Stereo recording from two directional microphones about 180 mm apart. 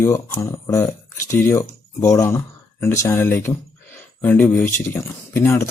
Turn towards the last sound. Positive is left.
turn(degrees=15)  # may be behind; listen again after turning